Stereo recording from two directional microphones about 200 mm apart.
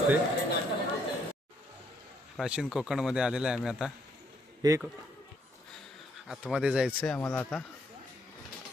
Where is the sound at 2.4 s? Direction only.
5° right (ahead or behind).